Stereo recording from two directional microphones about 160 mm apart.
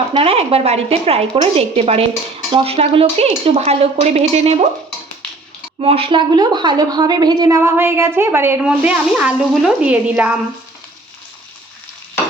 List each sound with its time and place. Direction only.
0.2 s speech: 35° right (ahead or behind)
5.8 s a woman's voice: 35° right (ahead or behind); by 10.3 s 10° right (ahead or behind)